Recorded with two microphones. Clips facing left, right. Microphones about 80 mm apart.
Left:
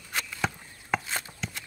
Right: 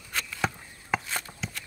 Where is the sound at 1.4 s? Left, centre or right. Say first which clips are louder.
Even; centre.